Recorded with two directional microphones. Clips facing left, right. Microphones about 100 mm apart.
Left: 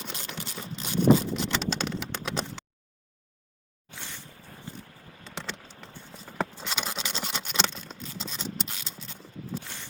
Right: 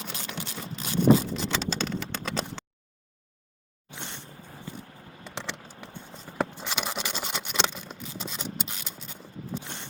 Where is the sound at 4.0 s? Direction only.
25° right (ahead or behind).